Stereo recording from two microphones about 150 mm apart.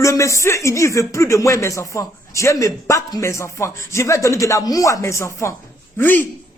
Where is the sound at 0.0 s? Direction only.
20° left (ahead or behind).